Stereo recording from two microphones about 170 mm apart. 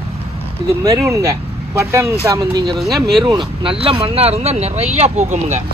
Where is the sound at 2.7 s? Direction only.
Centre (ahead or behind).